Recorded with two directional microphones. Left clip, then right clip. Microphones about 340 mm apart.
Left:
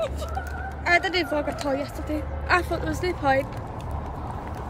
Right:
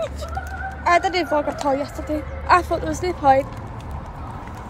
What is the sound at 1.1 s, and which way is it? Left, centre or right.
Speech, right.